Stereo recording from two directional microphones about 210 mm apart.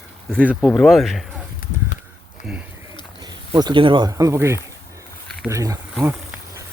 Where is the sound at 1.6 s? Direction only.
40° left (ahead or behind).